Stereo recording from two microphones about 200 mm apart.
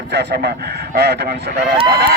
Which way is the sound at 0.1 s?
60° right (ahead or behind).